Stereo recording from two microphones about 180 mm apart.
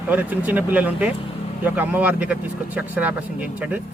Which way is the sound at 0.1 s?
10° right (ahead or behind).